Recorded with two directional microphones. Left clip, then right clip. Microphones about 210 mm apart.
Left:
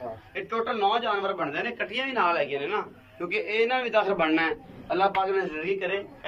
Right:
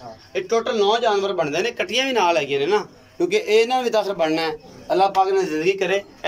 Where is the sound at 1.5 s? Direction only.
50° right (ahead or behind).